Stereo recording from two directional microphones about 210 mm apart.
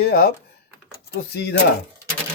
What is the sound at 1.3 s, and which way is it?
Speech, 50° left (ahead or behind).